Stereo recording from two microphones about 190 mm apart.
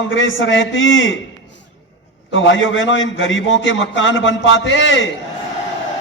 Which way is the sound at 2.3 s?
85° left.